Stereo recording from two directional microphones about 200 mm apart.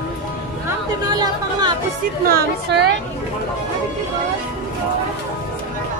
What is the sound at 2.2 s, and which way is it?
Speech, 55° right (ahead or behind).